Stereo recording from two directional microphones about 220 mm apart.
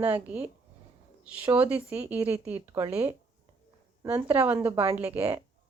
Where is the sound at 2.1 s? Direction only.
10° right (ahead or behind).